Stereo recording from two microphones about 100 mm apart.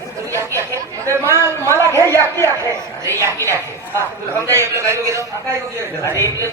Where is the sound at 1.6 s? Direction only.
25° left (ahead or behind).